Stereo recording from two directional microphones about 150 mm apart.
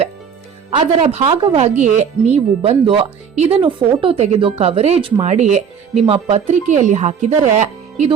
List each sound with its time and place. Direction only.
0.7 s speech: 40° right (ahead or behind)
5.2 s speech: 50° right (ahead or behind)